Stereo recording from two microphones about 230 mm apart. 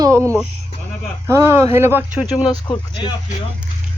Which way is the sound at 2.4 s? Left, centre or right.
Left.